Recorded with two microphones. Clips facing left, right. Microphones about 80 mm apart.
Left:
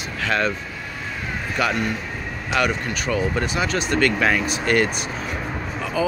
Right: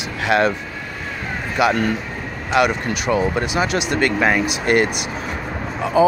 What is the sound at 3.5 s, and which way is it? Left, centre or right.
Speech, centre.